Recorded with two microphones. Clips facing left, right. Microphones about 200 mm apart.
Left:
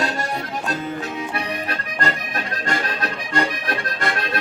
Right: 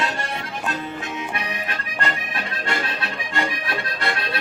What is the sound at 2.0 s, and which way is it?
Accordion, 40° left (ahead or behind).